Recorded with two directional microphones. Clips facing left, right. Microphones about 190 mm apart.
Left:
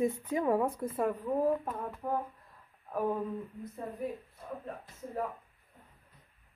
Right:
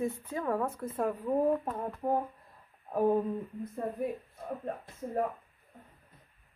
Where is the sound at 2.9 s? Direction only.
30° right (ahead or behind).